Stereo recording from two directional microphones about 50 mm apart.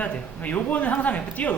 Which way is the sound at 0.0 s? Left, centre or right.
Left.